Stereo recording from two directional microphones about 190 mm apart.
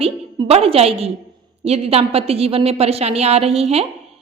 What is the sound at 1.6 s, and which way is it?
A woman's voice, 35° right (ahead or behind).